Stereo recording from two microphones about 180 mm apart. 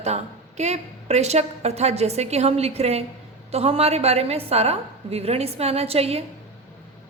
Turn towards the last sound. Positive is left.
turn(degrees=-35)  # may be behind; listen again after turning